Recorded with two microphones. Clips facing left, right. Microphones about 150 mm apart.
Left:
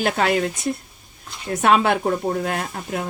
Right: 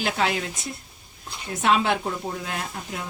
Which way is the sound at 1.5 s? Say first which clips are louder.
Left 4 dB; 55° left (ahead or behind).